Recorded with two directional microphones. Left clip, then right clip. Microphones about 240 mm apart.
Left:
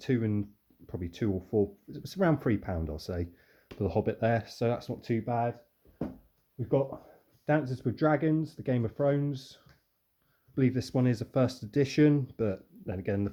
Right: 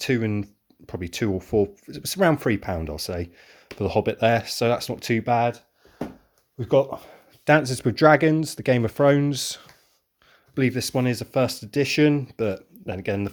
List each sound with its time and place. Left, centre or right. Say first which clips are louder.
0.0 s speech: right 7 dB; centre; by 5.5 s right
6.6 s speech: right 9 dB; right
10.5 s speech: right 6 dB; centre